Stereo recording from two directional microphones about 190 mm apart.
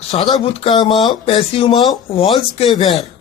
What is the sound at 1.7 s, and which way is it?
A woman's voice, centre (ahead or behind).